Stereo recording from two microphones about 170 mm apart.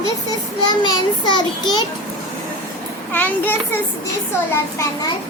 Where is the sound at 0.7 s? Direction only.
25° left (ahead or behind).